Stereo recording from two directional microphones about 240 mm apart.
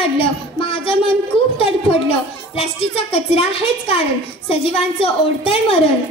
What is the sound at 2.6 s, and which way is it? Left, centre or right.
A woman's voice, left.